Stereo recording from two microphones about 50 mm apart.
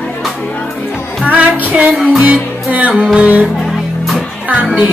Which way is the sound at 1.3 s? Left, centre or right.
Right.